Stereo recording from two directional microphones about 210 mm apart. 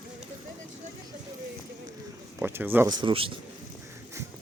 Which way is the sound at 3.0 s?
25° right (ahead or behind).